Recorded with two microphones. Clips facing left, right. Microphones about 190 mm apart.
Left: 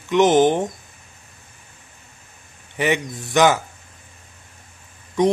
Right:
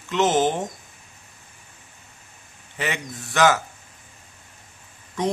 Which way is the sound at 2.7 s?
15° left (ahead or behind).